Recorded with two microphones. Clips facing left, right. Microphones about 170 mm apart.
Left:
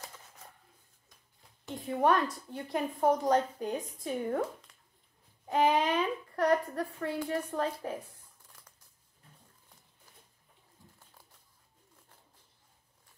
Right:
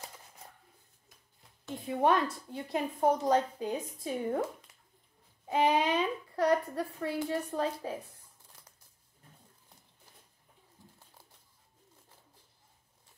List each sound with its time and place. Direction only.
2.0 s speech: 10° right (ahead or behind)
5.5 s speech: 10° right (ahead or behind)